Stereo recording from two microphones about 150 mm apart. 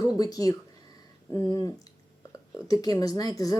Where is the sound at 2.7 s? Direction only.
25° left (ahead or behind).